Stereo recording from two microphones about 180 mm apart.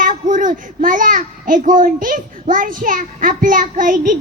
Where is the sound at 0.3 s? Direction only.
45° right (ahead or behind).